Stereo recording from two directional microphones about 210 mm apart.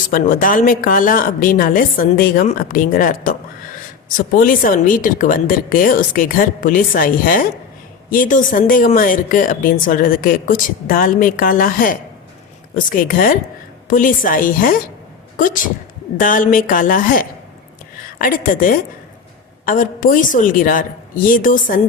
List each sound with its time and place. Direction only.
0.1 s speech: 40° left (ahead or behind)
4.4 s speech: 40° left (ahead or behind)
16.1 s speech: 40° left (ahead or behind)